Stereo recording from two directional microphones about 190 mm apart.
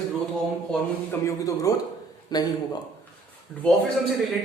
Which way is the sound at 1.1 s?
15° left (ahead or behind).